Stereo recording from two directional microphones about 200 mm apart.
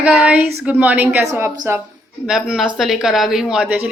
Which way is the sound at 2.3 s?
5° right (ahead or behind).